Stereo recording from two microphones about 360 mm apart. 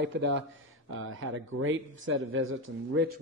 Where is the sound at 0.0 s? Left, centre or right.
Right.